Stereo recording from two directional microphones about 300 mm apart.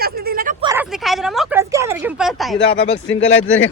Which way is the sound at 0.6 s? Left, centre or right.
Centre.